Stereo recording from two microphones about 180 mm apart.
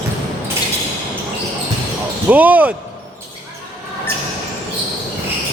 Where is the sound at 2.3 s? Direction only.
10° right (ahead or behind).